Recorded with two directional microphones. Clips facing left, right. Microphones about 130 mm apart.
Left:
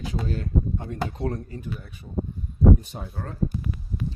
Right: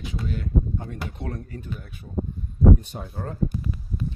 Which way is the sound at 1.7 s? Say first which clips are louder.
Left 1 dB; centre (ahead or behind).